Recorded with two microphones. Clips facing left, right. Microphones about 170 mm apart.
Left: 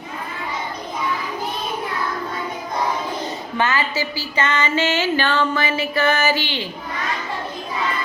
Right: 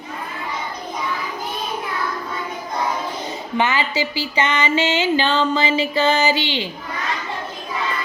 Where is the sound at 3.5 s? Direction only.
15° right (ahead or behind).